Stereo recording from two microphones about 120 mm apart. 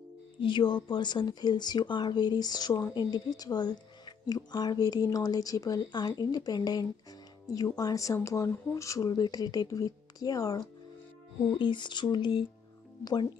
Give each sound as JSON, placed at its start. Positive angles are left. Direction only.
{"t": 0.4, "sound": "speech", "side_deg": 45}
{"t": 11.5, "sound": "speech", "side_deg": 40}